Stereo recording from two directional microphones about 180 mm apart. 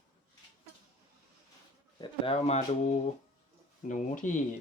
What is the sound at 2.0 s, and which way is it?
Speech, 30° left (ahead or behind).